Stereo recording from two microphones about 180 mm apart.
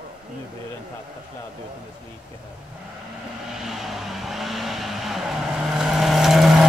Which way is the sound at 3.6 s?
Centre (ahead or behind).